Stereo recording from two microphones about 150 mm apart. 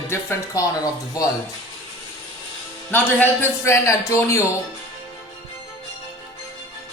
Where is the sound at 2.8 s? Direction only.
15° left (ahead or behind).